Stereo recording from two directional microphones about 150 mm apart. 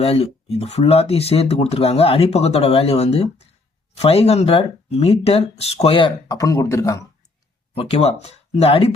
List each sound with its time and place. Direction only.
0.0 s speech: 40° left (ahead or behind)
6.2 s speech: 25° left (ahead or behind)
7.8 s speech: 40° left (ahead or behind)